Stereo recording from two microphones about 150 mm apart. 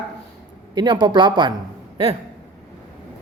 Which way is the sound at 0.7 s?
30° right (ahead or behind).